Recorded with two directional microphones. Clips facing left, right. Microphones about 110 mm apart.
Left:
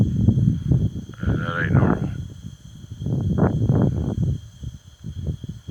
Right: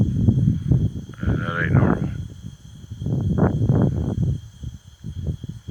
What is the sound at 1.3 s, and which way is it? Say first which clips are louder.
Speech: even; 25° left (ahead or behind).